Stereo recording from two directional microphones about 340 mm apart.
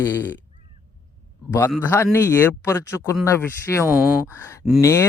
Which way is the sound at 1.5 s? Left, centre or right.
Centre.